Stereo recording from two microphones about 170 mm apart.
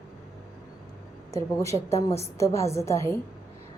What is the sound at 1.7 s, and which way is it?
A woman's voice, 20° left (ahead or behind).